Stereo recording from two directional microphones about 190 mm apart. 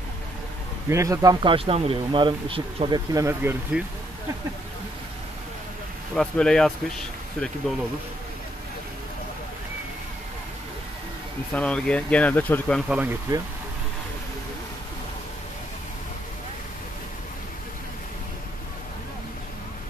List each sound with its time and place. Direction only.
0.8 s speech: 15° right (ahead or behind)
3.7 s speech: 5° right (ahead or behind)
6.1 s speech: 5° left (ahead or behind)
11.5 s speech: 5° left (ahead or behind)
12.8 s speech: 5° right (ahead or behind)